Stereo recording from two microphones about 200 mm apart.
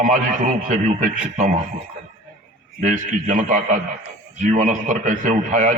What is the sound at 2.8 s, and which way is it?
A man's voice, 40° right (ahead or behind).